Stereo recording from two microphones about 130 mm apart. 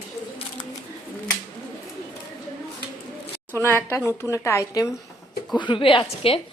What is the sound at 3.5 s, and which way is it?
A woman's voice, 15° left (ahead or behind).